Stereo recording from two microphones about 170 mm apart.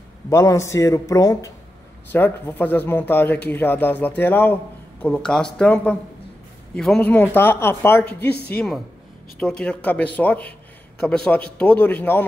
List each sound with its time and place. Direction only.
0.3 s speech: 20° left (ahead or behind)
8.3 s speech: 70° left (ahead or behind)
8.5 s speech: centre (ahead or behind)